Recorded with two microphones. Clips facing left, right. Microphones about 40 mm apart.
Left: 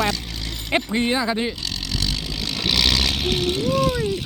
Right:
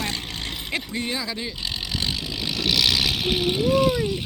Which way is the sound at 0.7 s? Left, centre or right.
Left.